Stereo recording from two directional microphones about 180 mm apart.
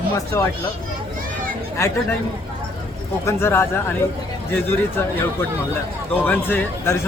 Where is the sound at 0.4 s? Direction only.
15° left (ahead or behind).